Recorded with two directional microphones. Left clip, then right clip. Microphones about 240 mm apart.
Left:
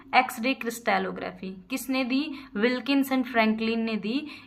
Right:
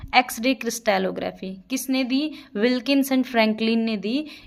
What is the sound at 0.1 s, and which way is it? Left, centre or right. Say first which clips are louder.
A woman's voice: right 3 dB; right.